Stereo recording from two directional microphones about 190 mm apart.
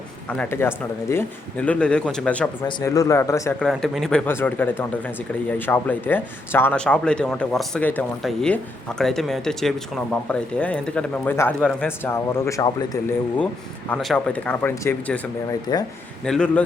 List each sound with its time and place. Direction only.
0.3 s speech: 10° left (ahead or behind)
2.6 s speech: 20° left (ahead or behind)
3.6 s speech: centre (ahead or behind)
15.7 s speech: 20° left (ahead or behind)
16.2 s speech: 5° left (ahead or behind)